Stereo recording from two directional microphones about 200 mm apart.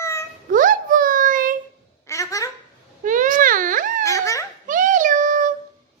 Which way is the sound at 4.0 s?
15° left (ahead or behind).